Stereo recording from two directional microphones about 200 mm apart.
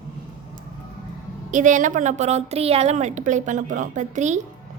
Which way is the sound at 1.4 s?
40° right (ahead or behind).